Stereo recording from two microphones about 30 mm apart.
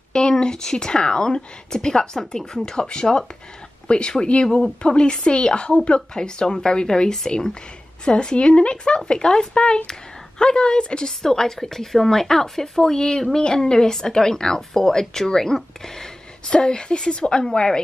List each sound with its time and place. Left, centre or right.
0.1 s a woman's voice: left
11.1 s a woman's voice: centre
16.4 s a woman's voice: left